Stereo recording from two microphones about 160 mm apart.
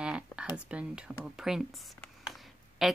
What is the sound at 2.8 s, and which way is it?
Speech, centre (ahead or behind).